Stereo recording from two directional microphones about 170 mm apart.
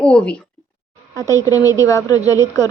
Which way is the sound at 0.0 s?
5° left (ahead or behind).